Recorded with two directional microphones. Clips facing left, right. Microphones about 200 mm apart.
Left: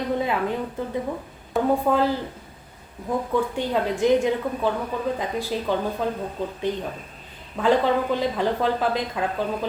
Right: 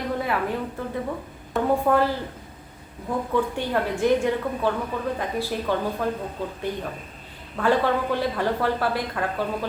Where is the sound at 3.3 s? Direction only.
15° left (ahead or behind).